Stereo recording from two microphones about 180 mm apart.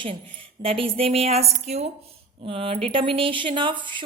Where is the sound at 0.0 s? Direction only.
30° right (ahead or behind).